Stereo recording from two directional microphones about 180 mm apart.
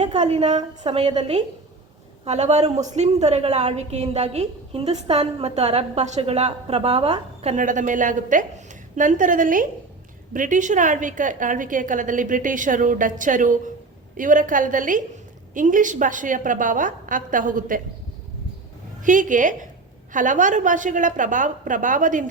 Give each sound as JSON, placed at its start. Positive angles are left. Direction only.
{"t": 0.0, "sound": "a woman's voice", "side_deg": -40}
{"t": 19.0, "sound": "a woman's voice", "side_deg": -45}